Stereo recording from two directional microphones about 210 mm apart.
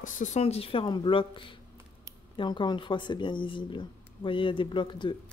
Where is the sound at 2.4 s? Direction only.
20° left (ahead or behind).